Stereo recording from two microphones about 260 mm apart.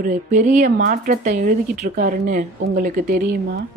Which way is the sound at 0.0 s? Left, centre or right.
Right.